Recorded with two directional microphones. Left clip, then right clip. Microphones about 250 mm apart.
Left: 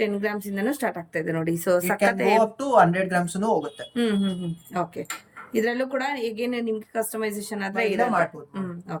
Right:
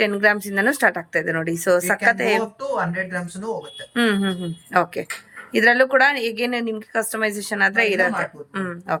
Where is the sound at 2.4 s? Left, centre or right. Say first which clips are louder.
Left 5 dB; left.